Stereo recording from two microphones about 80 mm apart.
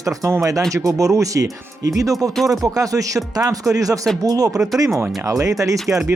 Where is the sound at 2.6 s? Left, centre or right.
Right.